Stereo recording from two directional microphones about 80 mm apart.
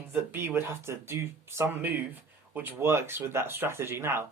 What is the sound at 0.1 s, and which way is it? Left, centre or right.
Speech, right.